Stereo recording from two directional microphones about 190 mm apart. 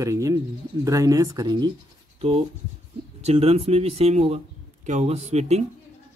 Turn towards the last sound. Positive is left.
turn(degrees=-35)  # may be behind; listen again after turning